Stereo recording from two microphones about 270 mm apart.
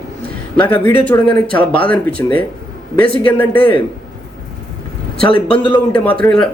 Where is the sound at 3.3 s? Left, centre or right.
Centre.